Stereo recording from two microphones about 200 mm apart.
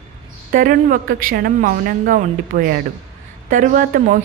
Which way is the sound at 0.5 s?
45° right (ahead or behind).